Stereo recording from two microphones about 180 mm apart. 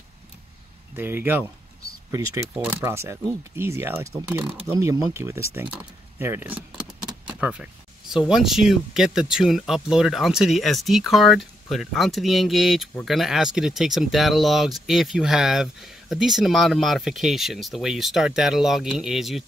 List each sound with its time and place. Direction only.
0.9 s speech: 10° right (ahead or behind)
7.2 s vehicle: 5° right (ahead or behind)
8.3 s speech: centre (ahead or behind)